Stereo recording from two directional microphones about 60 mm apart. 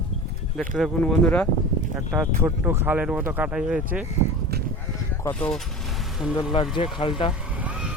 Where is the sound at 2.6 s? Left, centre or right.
Right.